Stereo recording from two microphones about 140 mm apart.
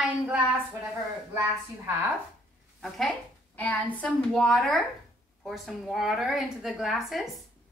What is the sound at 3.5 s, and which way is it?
A woman's voice, 10° left (ahead or behind).